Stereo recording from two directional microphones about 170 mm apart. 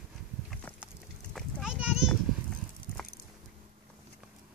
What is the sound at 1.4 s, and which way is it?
Horse, centre (ahead or behind).